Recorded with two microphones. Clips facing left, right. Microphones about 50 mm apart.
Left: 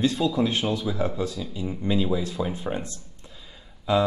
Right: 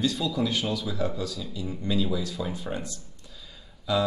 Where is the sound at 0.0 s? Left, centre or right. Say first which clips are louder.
Left 4 dB; left.